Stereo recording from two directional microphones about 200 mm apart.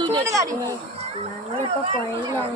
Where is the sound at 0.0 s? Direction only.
20° right (ahead or behind).